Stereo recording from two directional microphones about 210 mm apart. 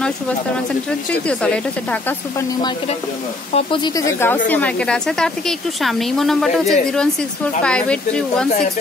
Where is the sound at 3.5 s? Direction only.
25° left (ahead or behind); by 8.5 s 5° left (ahead or behind).